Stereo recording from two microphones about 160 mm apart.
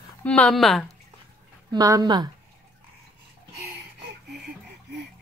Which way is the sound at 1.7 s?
25° right (ahead or behind).